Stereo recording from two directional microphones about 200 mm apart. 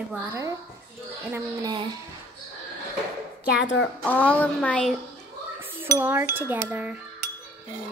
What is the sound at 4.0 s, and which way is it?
Speech, 5° left (ahead or behind).